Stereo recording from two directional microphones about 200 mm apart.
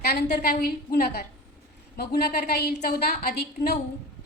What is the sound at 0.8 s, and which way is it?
A woman's voice, 50° left (ahead or behind).